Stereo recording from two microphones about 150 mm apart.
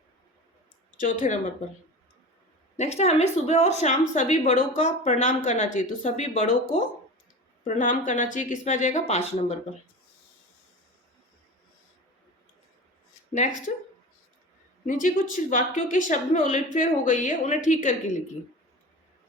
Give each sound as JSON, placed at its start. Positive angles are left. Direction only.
{"t": 0.9, "sound": "speech", "side_deg": 55}
{"t": 2.7, "sound": "speech", "side_deg": 45}
{"t": 14.8, "sound": "speech", "side_deg": 60}